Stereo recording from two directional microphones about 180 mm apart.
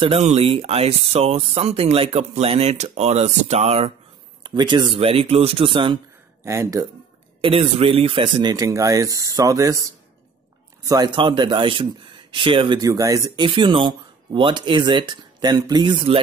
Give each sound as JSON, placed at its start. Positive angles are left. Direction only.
{"t": 0.0, "sound": "speech", "side_deg": -35}
{"t": 6.4, "sound": "speech", "side_deg": -15}
{"t": 7.4, "sound": "speech", "side_deg": -30}